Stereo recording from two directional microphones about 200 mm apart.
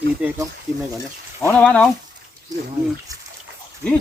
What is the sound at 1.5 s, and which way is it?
Speech, 5° left (ahead or behind).